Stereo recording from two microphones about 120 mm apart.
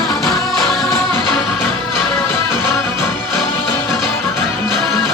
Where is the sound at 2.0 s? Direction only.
5° left (ahead or behind).